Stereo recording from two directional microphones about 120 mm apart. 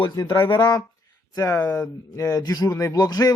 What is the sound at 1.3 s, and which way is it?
Speech, 25° left (ahead or behind).